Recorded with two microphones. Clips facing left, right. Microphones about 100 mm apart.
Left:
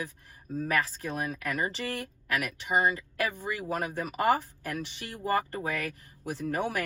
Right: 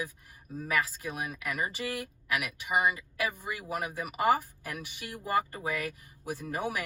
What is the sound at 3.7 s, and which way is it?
Speech, 50° left (ahead or behind).